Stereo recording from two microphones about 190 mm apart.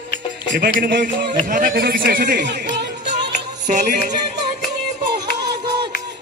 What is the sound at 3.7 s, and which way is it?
Music, 40° right (ahead or behind).